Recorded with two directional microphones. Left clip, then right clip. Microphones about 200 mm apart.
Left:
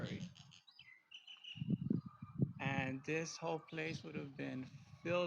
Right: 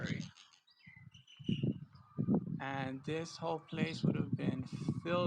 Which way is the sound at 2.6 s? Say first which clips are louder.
Right 1 dB; 25° right (ahead or behind).